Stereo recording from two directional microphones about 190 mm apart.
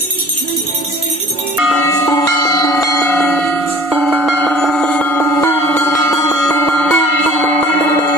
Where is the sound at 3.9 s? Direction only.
Centre (ahead or behind); by 6.6 s 15° left (ahead or behind).